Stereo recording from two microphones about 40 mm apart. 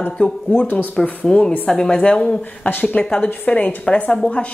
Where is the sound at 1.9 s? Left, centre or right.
Left.